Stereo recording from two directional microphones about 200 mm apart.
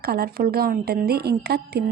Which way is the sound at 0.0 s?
50° right (ahead or behind).